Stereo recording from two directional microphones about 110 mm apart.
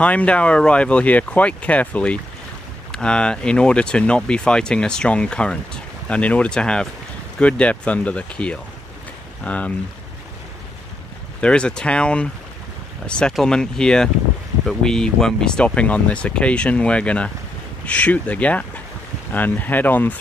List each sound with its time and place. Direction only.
0.0 s speech: 10° left (ahead or behind)
11.4 s speech: 10° left (ahead or behind)